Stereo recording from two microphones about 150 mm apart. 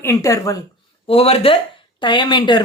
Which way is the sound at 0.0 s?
20° left (ahead or behind).